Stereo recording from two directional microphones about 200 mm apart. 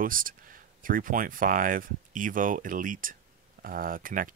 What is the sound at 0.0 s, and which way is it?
Speech, 45° right (ahead or behind).